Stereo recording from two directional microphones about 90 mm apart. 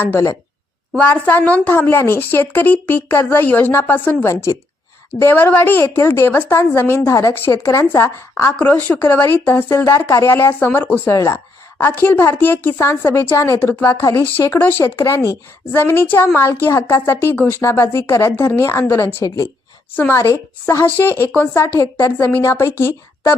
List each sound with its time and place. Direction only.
0.0 s speech: 30° left (ahead or behind)
0.9 s speech: 20° left (ahead or behind)
8.5 s speech: 15° left (ahead or behind)
11.1 s speech: 35° left (ahead or behind)
11.8 s speech: 25° left (ahead or behind)